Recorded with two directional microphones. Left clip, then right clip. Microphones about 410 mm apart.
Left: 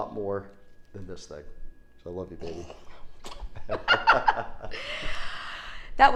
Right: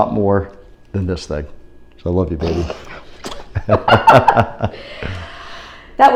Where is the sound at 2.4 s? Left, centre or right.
Right.